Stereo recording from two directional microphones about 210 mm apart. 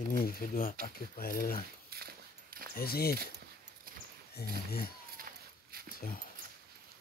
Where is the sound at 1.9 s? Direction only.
45° right (ahead or behind).